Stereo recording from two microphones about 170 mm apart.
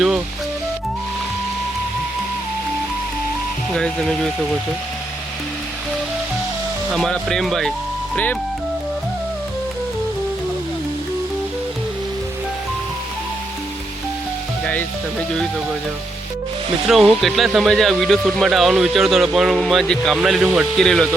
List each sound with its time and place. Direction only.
3.8 s speech: 5° left (ahead or behind)
6.9 s speech: centre (ahead or behind)
14.6 s music: 10° left (ahead or behind)
16.9 s speech: centre (ahead or behind)